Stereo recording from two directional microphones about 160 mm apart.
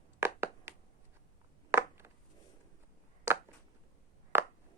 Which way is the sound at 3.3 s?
15° right (ahead or behind).